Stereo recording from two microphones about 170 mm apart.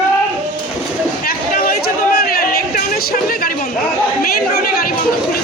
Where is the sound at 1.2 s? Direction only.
60° left (ahead or behind).